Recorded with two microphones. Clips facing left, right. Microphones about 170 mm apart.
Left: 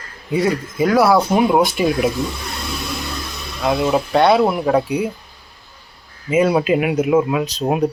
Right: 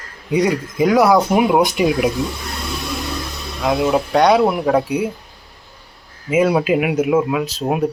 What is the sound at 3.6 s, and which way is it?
Speech, centre (ahead or behind).